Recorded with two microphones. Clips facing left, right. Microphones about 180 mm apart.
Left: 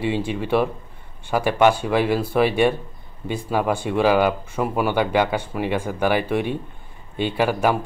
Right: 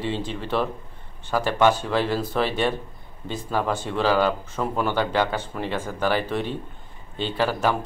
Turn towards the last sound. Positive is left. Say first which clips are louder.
# left 3 dB
turn(degrees=15)  # may be behind; listen again after turning